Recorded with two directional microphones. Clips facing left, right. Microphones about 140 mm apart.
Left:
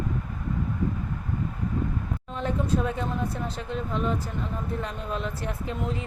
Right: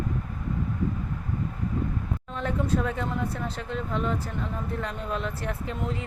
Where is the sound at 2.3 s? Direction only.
20° left (ahead or behind).